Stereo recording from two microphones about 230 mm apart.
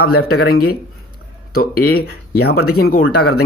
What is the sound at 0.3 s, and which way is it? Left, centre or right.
Speech, left.